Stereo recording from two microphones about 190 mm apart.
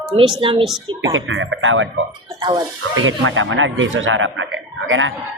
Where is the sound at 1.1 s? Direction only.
90° right.